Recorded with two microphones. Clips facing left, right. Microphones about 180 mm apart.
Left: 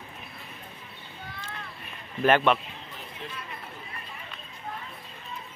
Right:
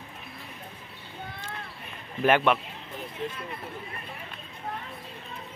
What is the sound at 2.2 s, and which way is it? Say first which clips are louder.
Speech: left 1 dB; 10° right (ahead or behind).